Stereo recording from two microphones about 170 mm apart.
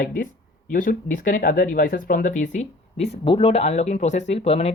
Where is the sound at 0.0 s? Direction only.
55° left (ahead or behind).